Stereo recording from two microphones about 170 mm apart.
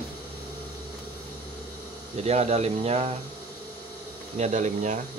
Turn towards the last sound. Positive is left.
turn(degrees=-45)  # may be behind; listen again after turning